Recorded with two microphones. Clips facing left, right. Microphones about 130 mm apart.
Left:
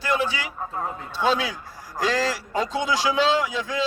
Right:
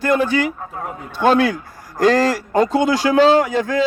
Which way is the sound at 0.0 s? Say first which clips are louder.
Right 8 dB; 50° right (ahead or behind).